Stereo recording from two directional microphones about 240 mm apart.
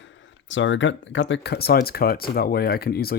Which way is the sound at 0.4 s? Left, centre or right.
Left.